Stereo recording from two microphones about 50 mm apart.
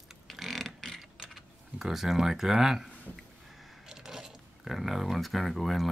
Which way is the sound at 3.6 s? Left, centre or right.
Centre.